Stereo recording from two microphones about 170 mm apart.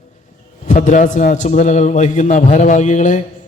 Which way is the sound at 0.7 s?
45° left (ahead or behind).